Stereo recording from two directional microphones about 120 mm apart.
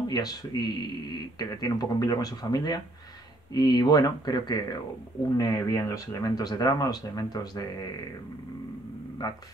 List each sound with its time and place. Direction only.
0.1 s speech: 35° left (ahead or behind)